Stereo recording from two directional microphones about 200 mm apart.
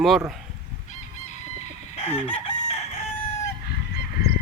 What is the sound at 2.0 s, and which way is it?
Chicken, 30° left (ahead or behind).